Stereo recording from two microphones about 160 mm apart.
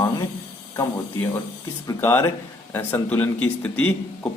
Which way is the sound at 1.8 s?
15° left (ahead or behind).